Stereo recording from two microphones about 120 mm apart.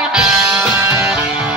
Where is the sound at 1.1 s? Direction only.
10° right (ahead or behind).